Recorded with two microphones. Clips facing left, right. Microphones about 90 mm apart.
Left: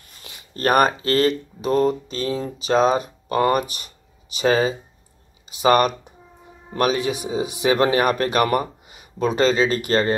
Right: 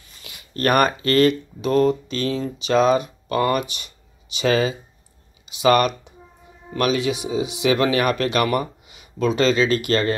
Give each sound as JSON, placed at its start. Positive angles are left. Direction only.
{"t": 0.2, "sound": "speech", "side_deg": 35}